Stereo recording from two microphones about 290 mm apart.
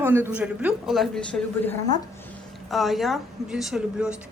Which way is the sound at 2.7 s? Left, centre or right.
Centre.